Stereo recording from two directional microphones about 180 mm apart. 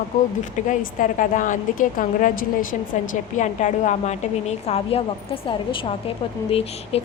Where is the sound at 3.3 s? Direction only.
40° left (ahead or behind).